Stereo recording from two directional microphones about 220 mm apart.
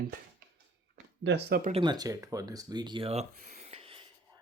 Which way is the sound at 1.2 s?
50° right (ahead or behind).